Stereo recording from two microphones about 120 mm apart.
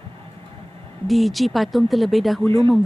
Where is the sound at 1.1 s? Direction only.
Centre (ahead or behind).